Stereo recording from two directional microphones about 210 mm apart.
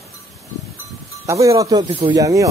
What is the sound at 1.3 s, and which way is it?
Speech, 15° right (ahead or behind).